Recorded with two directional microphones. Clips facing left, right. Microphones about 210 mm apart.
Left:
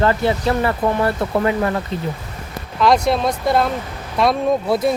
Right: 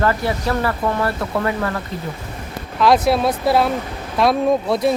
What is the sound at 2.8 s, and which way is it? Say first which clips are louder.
Speech: right 1 dB; centre (ahead or behind).